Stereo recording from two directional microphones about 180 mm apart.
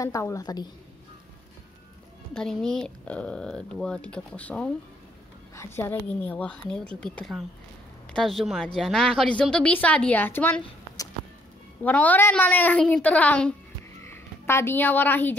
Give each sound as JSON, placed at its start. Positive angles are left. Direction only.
{"t": 0.0, "sound": "a woman's voice", "side_deg": 15}
{"t": 2.3, "sound": "speech", "side_deg": 5}
{"t": 5.8, "sound": "speech", "side_deg": 10}
{"t": 11.8, "sound": "a woman's voice", "side_deg": 10}